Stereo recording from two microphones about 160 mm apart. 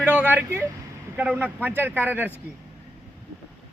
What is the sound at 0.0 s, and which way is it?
Vehicle, 10° right (ahead or behind).